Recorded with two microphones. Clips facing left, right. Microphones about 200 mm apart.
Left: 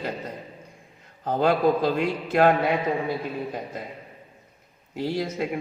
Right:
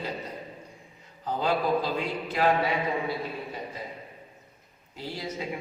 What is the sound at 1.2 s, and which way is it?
A man's voice, 55° left (ahead or behind).